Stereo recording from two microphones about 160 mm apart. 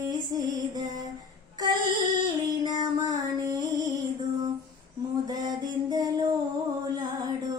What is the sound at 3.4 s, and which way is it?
Music, 20° right (ahead or behind).